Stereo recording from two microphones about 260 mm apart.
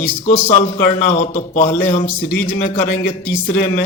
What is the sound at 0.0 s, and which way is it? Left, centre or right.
Speech, left.